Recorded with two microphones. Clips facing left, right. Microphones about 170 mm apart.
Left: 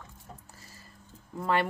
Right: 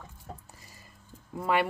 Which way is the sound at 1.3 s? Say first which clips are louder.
Right 1 dB; 10° right (ahead or behind).